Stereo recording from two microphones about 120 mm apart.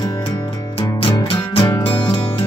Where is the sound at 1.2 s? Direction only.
50° left (ahead or behind).